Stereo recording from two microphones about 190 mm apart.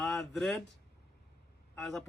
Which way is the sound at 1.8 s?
Centre (ahead or behind).